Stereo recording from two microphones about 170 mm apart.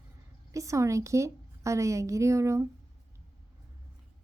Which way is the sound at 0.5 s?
20° right (ahead or behind).